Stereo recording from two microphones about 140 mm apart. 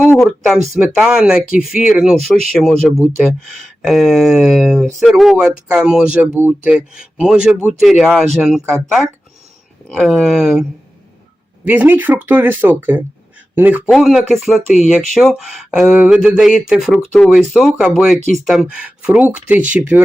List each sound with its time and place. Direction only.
0.4 s speech: 5° right (ahead or behind)
13.8 s speech: centre (ahead or behind)